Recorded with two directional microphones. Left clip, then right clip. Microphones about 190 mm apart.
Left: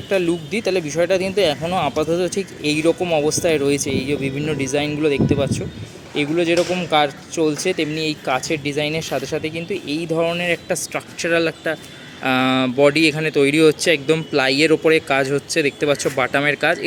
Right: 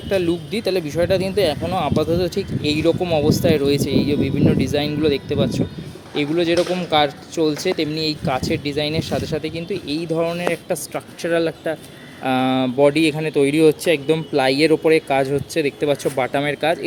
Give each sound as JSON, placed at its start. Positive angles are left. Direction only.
{"t": 0.1, "sound": "speech", "side_deg": -5}